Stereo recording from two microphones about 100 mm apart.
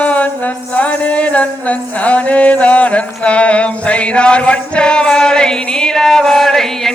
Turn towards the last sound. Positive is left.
turn(degrees=5)  # may be behind; listen again after turning